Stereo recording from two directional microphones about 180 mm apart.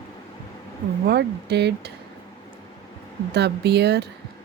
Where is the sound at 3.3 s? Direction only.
65° right (ahead or behind).